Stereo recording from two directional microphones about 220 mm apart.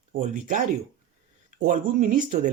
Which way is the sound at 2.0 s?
35° right (ahead or behind).